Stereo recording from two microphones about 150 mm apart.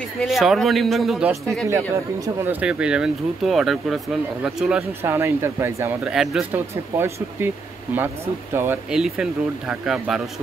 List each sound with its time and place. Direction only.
0.2 s speech: centre (ahead or behind)
5.0 s speech: 15° right (ahead or behind)
6.0 s speech: centre (ahead or behind)
6.5 s speech: 15° right (ahead or behind)
8.9 s speech: 5° right (ahead or behind)